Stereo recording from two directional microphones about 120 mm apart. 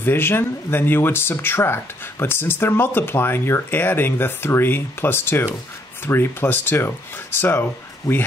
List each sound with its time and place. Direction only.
0.0 s speech: 20° left (ahead or behind)
8.1 s speech: 30° left (ahead or behind)